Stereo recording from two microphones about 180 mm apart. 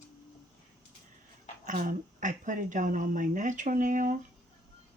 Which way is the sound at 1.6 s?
50° right (ahead or behind).